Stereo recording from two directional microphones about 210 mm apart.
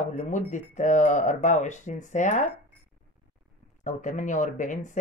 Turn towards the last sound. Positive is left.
turn(degrees=35)  # may be behind; listen again after turning